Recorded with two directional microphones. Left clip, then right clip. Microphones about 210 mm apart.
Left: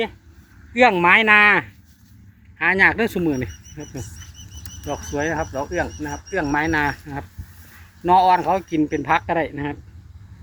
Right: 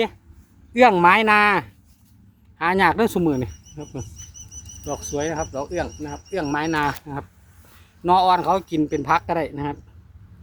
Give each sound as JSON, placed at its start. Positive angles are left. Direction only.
{"t": 0.7, "sound": "speech", "side_deg": -20}